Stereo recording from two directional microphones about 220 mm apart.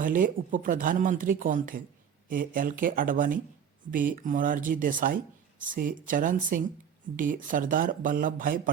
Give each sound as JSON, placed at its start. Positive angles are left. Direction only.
{"t": 0.0, "sound": "speech", "side_deg": -40}